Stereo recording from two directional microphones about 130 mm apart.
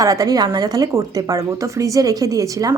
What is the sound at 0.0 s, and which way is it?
Speech, 30° right (ahead or behind).